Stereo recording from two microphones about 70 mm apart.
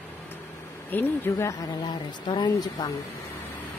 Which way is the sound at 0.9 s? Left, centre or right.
Left.